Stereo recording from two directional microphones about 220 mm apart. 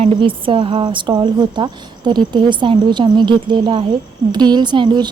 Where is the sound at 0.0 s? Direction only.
25° right (ahead or behind).